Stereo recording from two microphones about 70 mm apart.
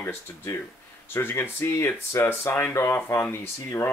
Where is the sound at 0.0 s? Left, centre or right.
Left.